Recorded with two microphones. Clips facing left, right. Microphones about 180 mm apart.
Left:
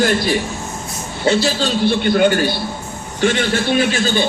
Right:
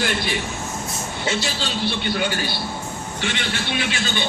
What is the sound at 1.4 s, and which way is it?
A man's voice, 45° left (ahead or behind).